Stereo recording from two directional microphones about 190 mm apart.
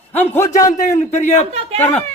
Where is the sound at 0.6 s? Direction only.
40° left (ahead or behind).